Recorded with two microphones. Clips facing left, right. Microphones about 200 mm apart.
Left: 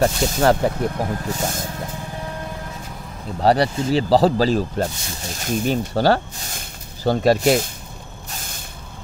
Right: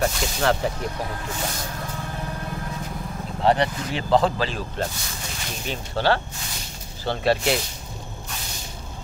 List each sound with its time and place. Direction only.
0.0 s speech: 40° left (ahead or behind)
3.4 s speech: 35° left (ahead or behind)
8.4 s spray: 50° left (ahead or behind)